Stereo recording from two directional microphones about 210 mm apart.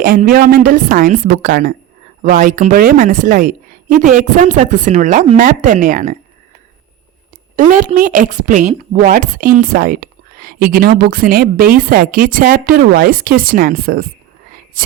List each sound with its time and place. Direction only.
0.0 s a woman's voice: 40° right (ahead or behind)
7.5 s a woman's voice: 40° right (ahead or behind)